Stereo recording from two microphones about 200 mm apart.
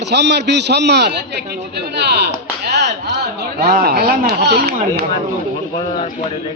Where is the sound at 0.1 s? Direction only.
55° right (ahead or behind).